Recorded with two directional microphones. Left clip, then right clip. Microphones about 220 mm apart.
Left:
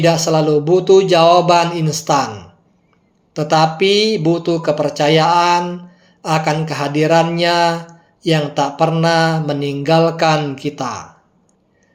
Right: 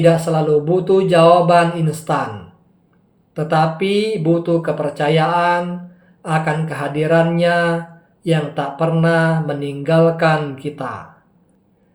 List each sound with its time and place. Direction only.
0.0 s mantra: 35° left (ahead or behind)
3.3 s mantra: 35° left (ahead or behind)